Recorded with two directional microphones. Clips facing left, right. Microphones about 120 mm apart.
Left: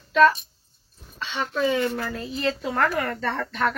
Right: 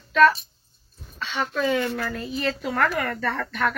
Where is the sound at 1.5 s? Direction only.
25° left (ahead or behind).